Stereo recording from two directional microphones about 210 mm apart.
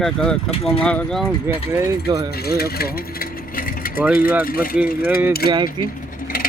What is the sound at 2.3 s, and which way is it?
Vehicle, 50° left (ahead or behind).